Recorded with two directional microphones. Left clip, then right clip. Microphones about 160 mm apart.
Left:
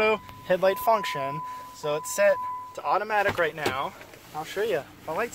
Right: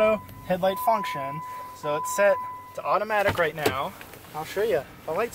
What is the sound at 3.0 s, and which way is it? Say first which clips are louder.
Speech: right 2 dB; 5° left (ahead or behind).